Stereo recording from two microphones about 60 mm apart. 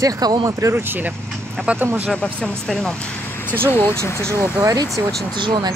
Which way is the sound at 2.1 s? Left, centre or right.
Centre.